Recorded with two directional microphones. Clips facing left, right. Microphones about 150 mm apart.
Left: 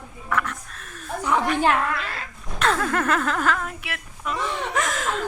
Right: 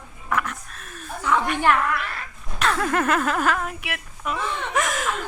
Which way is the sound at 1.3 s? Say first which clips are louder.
Even; 25° left (ahead or behind).